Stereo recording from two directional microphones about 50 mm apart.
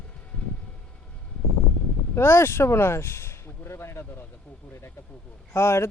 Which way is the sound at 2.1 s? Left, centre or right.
Left.